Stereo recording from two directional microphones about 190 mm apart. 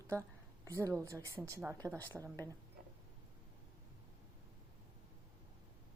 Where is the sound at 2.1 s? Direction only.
5° right (ahead or behind).